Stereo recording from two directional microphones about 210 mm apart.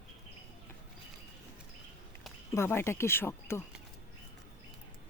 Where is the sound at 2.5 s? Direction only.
10° left (ahead or behind).